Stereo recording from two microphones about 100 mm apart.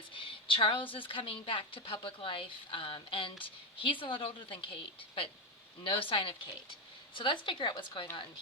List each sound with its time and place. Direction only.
0.1 s a woman's voice: 60° left (ahead or behind)
5.8 s a woman's voice: 60° left (ahead or behind)